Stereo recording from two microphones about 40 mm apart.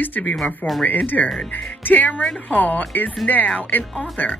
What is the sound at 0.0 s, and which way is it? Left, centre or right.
Speech, left.